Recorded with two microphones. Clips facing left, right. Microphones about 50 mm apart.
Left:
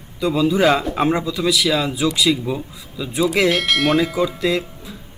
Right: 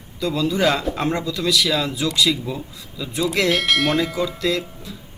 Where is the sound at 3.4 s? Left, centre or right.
Centre.